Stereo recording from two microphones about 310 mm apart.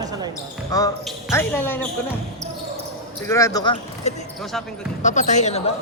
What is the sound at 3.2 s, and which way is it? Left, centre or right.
Speech, centre.